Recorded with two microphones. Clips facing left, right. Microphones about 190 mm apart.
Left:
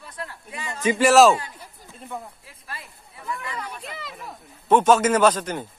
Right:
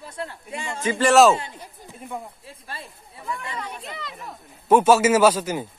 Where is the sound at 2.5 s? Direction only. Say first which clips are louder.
Right 2 dB; 30° right (ahead or behind).